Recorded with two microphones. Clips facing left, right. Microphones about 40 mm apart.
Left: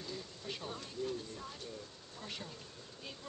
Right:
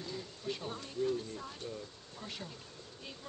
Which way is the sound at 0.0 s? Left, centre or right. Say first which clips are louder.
Right 3 dB; centre.